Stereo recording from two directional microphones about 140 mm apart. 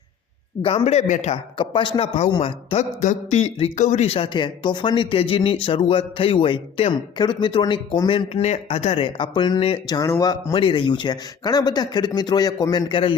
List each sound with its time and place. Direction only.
0.6 s speech: 50° left (ahead or behind)
1.5 s speech: 35° left (ahead or behind)
3.0 s speech: 60° left (ahead or behind); by 9.8 s 40° left (ahead or behind)
9.8 s a man's voice: 30° left (ahead or behind)